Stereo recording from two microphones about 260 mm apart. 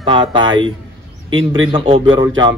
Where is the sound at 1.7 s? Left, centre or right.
Right.